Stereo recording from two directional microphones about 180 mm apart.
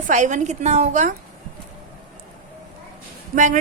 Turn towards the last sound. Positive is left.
turn(degrees=-45)  # may be behind; listen again after turning